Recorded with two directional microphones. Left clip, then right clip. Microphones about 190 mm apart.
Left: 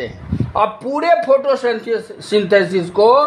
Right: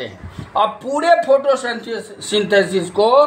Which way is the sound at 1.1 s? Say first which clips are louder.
Left 1 dB; 20° left (ahead or behind).